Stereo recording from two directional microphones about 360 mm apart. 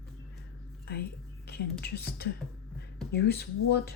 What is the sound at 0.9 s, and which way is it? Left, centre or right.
Speech, left.